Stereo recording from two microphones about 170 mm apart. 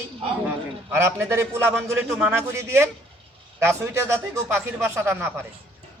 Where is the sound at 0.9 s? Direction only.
15° right (ahead or behind).